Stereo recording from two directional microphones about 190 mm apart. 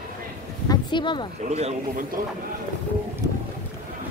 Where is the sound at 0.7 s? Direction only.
25° left (ahead or behind).